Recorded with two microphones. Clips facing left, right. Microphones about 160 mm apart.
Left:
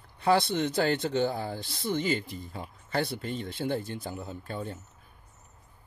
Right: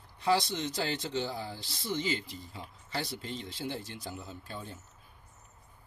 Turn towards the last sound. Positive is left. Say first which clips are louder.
# left 7 dB
turn(degrees=55)  # may be behind; listen again after turning